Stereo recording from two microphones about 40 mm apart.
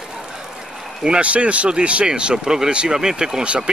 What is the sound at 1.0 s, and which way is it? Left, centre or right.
Speech, right.